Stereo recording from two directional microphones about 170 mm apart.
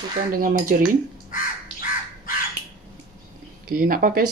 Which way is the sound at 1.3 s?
55° left (ahead or behind).